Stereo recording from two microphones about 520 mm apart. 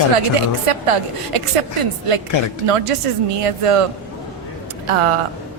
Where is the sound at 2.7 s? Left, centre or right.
Right.